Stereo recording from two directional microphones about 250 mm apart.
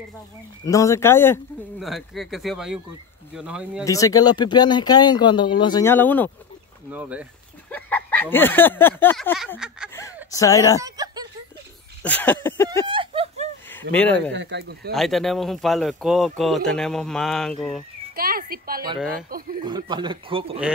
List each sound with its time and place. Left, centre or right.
0.7 s speech: centre
3.8 s speech: centre
6.9 s speech: centre
7.7 s a sound: centre
10.3 s speech: centre
10.8 s speech: centre
12.0 s speech: centre
12.8 s a sound: right
13.7 s speech: centre
14.3 s speech: right
14.9 s speech: centre
18.1 s speech: right
19.6 s a man's voice: centre